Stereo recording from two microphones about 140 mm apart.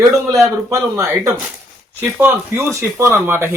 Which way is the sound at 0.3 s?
20° right (ahead or behind).